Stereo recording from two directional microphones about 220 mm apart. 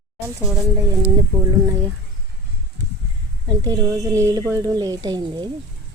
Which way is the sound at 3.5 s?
15° right (ahead or behind).